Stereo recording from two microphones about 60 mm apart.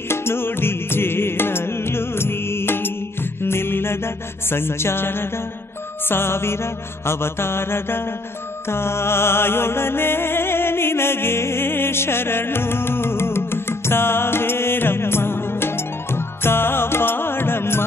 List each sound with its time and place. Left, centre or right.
0.1 s music: left
6.0 s mantra: left
8.6 s music: left